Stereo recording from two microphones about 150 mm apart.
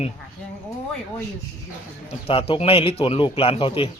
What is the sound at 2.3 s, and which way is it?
A man's voice, 40° left (ahead or behind).